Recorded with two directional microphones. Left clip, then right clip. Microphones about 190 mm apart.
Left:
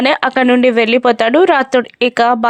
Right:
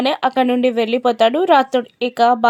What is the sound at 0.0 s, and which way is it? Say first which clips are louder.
Speech: left 4 dB; 20° left (ahead or behind).